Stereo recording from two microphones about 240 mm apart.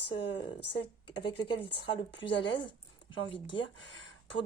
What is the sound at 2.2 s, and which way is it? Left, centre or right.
Speech, left.